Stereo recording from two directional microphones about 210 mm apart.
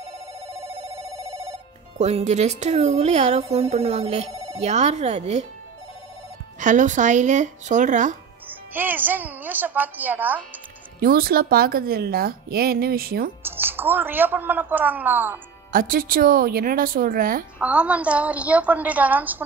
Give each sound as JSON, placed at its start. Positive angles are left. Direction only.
{"t": 1.3, "sound": "telephone bell ringing", "side_deg": -15}
{"t": 2.0, "sound": "speech", "side_deg": -30}
{"t": 6.6, "sound": "speech", "side_deg": -35}
{"t": 8.5, "sound": "speech", "side_deg": -10}
{"t": 11.0, "sound": "speech", "side_deg": -45}
{"t": 13.4, "sound": "speech", "side_deg": -10}
{"t": 15.7, "sound": "speech", "side_deg": -40}
{"t": 17.6, "sound": "speech", "side_deg": -5}